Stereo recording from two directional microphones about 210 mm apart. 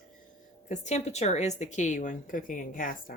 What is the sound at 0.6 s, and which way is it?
A woman's voice, 35° left (ahead or behind).